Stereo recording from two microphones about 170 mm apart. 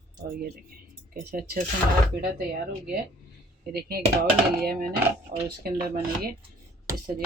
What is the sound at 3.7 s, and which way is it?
Speech, 65° right (ahead or behind).